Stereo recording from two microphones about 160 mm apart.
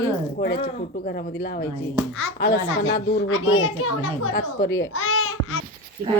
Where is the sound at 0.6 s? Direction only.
60° left (ahead or behind).